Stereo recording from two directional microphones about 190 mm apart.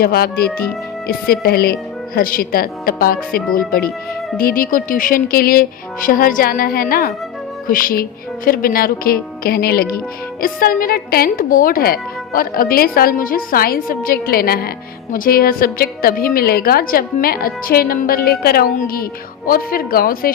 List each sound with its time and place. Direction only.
0.0 s a woman's voice: 55° left (ahead or behind)